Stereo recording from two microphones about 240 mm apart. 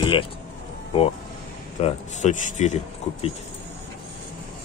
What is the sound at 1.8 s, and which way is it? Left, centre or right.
Speech, left.